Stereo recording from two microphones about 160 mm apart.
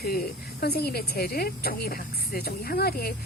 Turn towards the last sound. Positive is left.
turn(degrees=75)  # may be behind; listen again after turning